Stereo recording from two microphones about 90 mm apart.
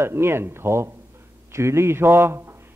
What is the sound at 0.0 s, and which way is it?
A man's voice, 25° right (ahead or behind).